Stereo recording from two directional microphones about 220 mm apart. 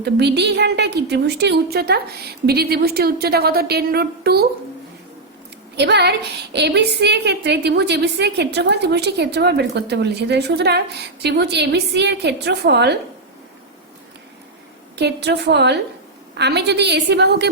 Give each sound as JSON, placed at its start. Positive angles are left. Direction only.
{"t": 0.0, "sound": "a woman's voice", "side_deg": -50}
{"t": 5.7, "sound": "a woman's voice", "side_deg": -50}
{"t": 14.9, "sound": "a woman's voice", "side_deg": -50}